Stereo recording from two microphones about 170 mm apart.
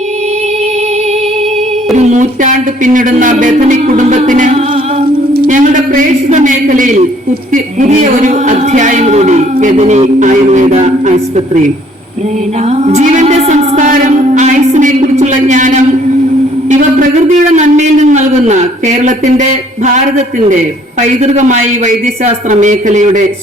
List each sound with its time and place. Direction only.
2.0 s speech: 45° right (ahead or behind)
5.5 s speech: 50° right (ahead or behind)
12.7 s speech: 40° right (ahead or behind)
21.2 s speech: 45° right (ahead or behind)